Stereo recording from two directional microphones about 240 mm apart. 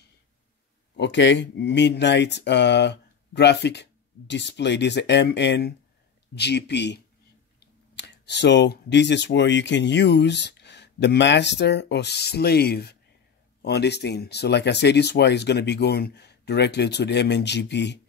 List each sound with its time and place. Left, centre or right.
0.9 s speech: left